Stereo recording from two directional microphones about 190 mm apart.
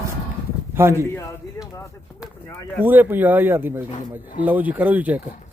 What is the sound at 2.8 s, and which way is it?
Speech, 10° right (ahead or behind).